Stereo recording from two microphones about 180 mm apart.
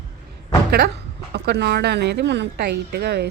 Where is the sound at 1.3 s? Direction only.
65° right (ahead or behind).